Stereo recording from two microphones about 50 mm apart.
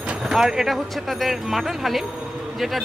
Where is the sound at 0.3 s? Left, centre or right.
Centre.